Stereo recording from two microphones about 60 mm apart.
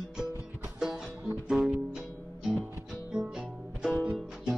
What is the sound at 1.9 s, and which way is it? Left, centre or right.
Music, centre.